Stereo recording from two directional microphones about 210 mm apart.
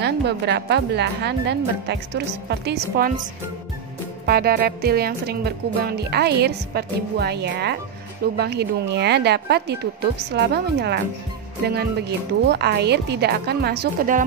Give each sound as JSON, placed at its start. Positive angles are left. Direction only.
{"t": 0.0, "sound": "speech", "side_deg": -55}
{"t": 4.3, "sound": "speech", "side_deg": -45}